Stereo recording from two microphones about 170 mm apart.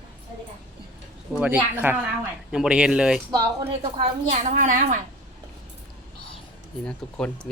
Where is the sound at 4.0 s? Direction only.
45° right (ahead or behind).